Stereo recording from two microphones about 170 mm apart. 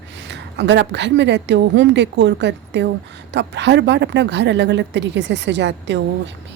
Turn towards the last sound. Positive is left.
turn(degrees=-90)